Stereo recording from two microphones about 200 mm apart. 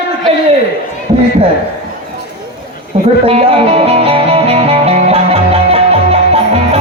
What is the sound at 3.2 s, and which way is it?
Music, 30° right (ahead or behind).